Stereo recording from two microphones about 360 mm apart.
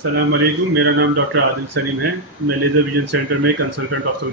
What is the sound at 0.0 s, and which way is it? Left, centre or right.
Speech, right.